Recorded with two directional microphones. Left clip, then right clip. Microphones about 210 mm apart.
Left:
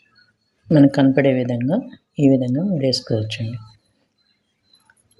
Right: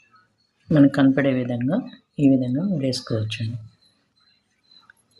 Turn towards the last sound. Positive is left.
turn(degrees=20)  # may be behind; listen again after turning